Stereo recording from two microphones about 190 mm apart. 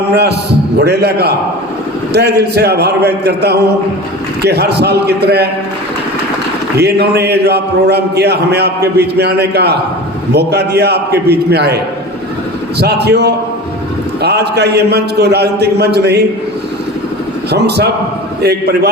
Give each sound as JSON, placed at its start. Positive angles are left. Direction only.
{"t": 0.1, "sound": "a man's voice", "side_deg": -60}
{"t": 6.7, "sound": "a man's voice", "side_deg": -60}
{"t": 12.8, "sound": "a man's voice", "side_deg": -60}
{"t": 17.5, "sound": "a man's voice", "side_deg": -60}